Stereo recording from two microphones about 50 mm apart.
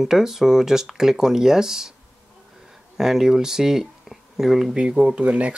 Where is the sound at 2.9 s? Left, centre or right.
Centre.